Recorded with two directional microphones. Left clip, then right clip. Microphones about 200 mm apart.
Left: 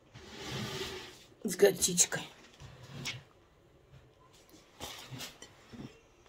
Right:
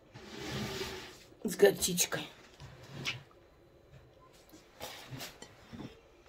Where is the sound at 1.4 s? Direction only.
15° left (ahead or behind).